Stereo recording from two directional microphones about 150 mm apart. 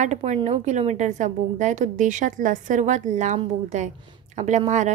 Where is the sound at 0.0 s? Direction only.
50° right (ahead or behind).